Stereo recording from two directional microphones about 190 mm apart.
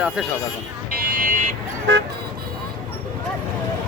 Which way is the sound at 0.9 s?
45° right (ahead or behind).